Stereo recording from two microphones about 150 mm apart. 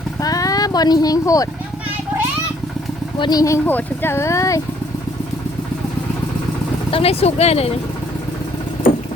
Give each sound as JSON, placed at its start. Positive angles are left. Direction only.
{"t": 0.2, "sound": "speech", "side_deg": 25}
{"t": 3.2, "sound": "speech", "side_deg": 25}
{"t": 6.9, "sound": "speech", "side_deg": 40}